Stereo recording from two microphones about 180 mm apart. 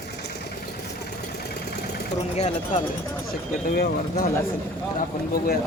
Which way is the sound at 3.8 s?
55° left (ahead or behind).